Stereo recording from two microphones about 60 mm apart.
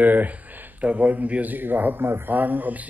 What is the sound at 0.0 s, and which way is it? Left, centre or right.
A man's voice, right.